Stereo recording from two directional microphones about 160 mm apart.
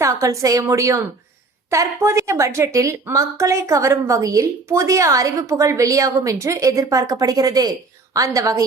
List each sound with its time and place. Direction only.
0.0 s a woman's voice: 20° right (ahead or behind)